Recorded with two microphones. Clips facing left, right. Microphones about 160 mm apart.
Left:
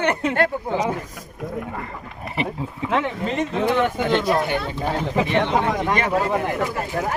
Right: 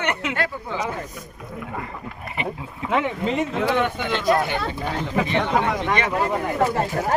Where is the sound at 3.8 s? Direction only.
35° left (ahead or behind).